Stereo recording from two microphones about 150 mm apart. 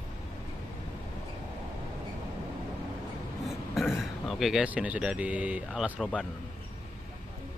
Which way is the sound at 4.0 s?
Centre (ahead or behind).